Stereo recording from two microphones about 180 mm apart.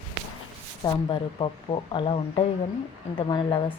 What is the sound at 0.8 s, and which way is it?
Speech, 25° left (ahead or behind).